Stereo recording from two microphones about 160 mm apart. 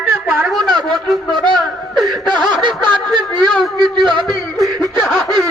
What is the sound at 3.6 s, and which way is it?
A man's voice, centre (ahead or behind).